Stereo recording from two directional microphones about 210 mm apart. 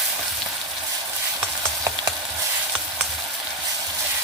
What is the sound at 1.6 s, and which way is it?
Stir, 15° right (ahead or behind).